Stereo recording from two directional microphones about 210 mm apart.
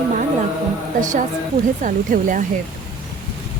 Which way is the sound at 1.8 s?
40° right (ahead or behind).